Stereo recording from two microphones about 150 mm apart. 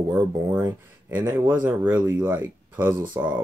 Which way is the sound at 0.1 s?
15° right (ahead or behind).